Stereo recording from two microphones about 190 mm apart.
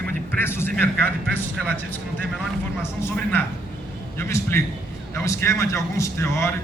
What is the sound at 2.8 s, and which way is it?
Speech, 10° left (ahead or behind).